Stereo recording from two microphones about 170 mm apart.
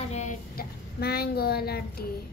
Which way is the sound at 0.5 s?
65° left (ahead or behind).